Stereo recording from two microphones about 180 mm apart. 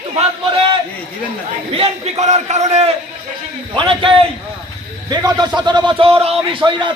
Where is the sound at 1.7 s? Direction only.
35° right (ahead or behind).